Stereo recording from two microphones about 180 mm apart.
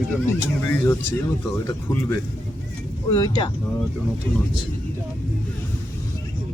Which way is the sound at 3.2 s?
20° left (ahead or behind).